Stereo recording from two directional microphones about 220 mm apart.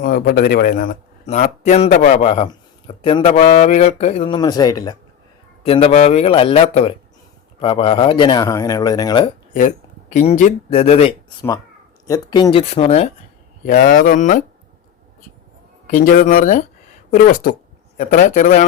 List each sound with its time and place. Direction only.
0.0 s speech: 40° left (ahead or behind); by 4.9 s 15° left (ahead or behind)
5.6 s speech: 25° left (ahead or behind)
9.5 s speech: 35° left (ahead or behind)
12.0 s speech: 20° left (ahead or behind)
13.7 s speech: 40° left (ahead or behind)
15.9 s speech: 35° left (ahead or behind)